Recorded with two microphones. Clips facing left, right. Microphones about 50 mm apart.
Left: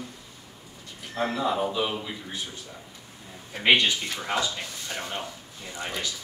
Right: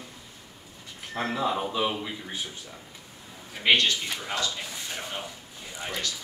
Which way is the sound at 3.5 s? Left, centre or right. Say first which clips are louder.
Left 1 dB; centre.